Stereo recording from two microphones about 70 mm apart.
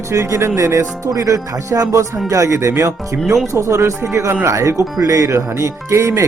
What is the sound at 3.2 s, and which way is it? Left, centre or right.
Speech, centre.